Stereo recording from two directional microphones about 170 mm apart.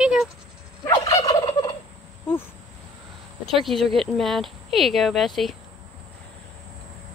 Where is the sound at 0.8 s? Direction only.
20° left (ahead or behind).